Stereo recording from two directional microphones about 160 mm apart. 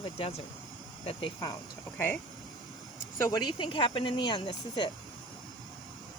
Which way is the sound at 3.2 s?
25° left (ahead or behind).